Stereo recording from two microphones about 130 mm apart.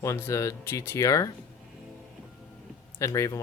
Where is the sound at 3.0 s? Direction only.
25° left (ahead or behind).